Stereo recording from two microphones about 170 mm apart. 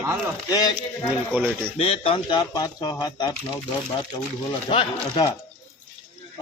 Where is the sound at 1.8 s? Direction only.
35° left (ahead or behind).